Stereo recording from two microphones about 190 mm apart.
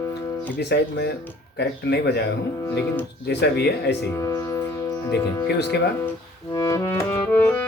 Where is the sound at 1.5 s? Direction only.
60° left (ahead or behind).